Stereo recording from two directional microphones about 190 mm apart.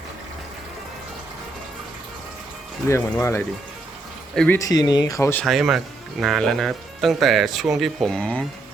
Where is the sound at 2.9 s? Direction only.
15° left (ahead or behind).